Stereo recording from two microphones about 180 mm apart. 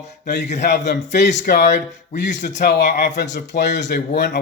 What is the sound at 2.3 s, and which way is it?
Speech, 70° left (ahead or behind).